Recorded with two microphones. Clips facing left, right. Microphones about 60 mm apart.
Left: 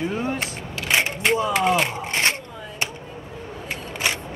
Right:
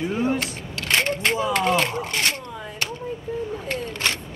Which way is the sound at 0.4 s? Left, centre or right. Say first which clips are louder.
Even; centre.